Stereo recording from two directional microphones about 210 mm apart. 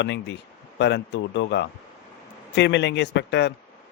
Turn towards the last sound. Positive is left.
turn(degrees=55)  # may be behind; listen again after turning